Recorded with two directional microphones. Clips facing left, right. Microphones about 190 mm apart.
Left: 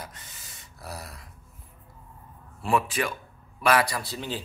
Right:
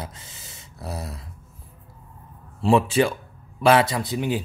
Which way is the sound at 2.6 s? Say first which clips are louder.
Right 8 dB; 25° right (ahead or behind).